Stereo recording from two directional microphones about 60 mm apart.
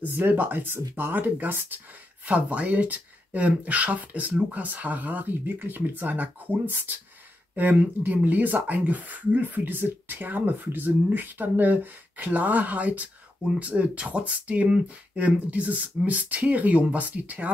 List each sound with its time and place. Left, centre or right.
0.0 s speech: right
2.2 s speech: right